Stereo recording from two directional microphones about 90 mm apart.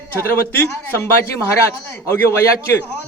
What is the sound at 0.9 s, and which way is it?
A man's voice, 25° left (ahead or behind).